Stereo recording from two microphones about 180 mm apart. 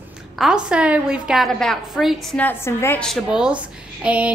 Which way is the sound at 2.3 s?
10° left (ahead or behind).